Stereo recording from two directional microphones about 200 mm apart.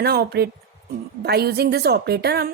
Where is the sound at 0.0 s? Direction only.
50° right (ahead or behind).